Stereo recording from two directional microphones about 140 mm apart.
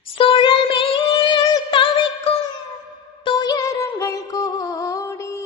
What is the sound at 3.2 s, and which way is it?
Music, 30° left (ahead or behind).